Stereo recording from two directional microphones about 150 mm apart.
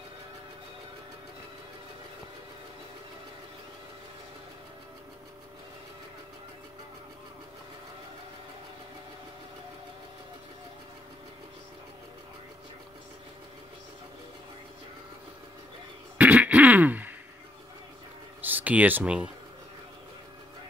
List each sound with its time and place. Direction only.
16.2 s throat clearing: 10° right (ahead or behind)
18.4 s speech: 10° right (ahead or behind)